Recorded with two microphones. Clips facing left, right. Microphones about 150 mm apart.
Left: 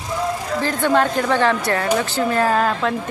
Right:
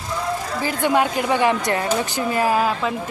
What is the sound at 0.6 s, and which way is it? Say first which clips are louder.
Speech: left 2 dB; 10° right (ahead or behind).